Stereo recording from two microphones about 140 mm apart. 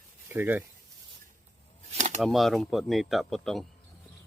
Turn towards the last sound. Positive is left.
turn(degrees=0)  # may be behind; listen again after turning